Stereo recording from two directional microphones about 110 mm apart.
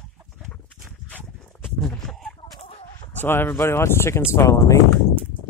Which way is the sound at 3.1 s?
20° left (ahead or behind).